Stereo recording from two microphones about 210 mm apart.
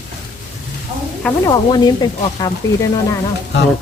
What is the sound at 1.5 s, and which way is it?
Speech, 20° left (ahead or behind).